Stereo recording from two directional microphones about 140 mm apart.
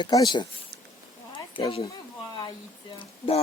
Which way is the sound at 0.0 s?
30° left (ahead or behind).